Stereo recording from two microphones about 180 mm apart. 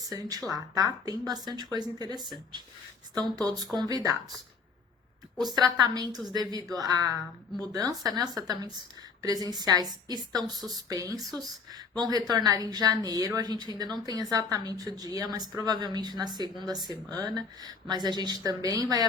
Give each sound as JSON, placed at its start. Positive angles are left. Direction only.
{"t": 0.1, "sound": "a woman's voice", "side_deg": -20}
{"t": 3.3, "sound": "a woman's voice", "side_deg": -20}
{"t": 5.5, "sound": "a woman's voice", "side_deg": -20}